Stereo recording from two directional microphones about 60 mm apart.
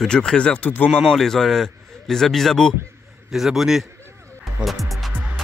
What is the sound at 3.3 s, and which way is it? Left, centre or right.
Speech, centre.